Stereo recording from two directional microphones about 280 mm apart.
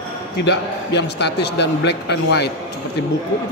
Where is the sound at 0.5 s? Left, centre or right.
Left.